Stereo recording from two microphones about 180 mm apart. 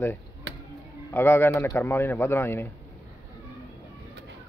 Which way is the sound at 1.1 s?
15° left (ahead or behind).